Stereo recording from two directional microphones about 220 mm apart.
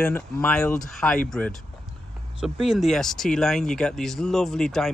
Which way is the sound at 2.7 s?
Centre (ahead or behind).